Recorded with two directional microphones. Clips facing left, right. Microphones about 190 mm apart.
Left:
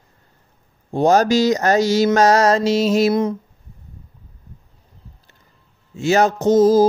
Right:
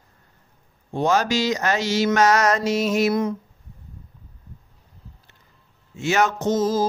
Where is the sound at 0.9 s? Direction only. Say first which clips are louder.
Left 6 dB; 40° left (ahead or behind).